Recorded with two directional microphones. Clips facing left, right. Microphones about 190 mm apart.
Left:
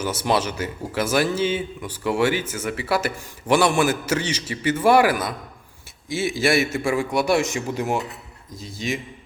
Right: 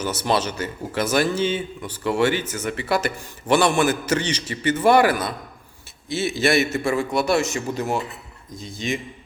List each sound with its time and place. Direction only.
0.0 s speech: 10° left (ahead or behind)